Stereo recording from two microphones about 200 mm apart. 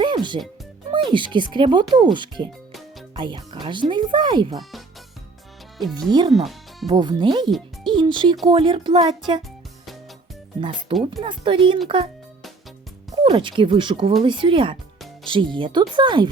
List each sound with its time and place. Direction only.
0.0 s music: 25° right (ahead or behind)
0.9 s speech: 25° right (ahead or behind)
6.1 s speech: 20° right (ahead or behind)
6.3 s music: centre (ahead or behind)
6.8 s speech: 20° right (ahead or behind)
7.9 s music: 25° right (ahead or behind)
8.4 s speech: 25° right (ahead or behind)
10.6 s speech: 25° right (ahead or behind)
13.2 s speech: 25° right (ahead or behind)